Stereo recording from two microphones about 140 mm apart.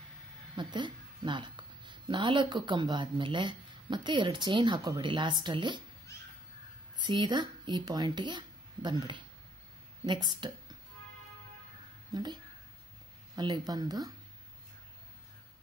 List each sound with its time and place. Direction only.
0.6 s a woman's voice: 35° right (ahead or behind)
7.0 s speech: 30° right (ahead or behind)
12.1 s speech: 30° right (ahead or behind)
13.4 s speech: 30° right (ahead or behind)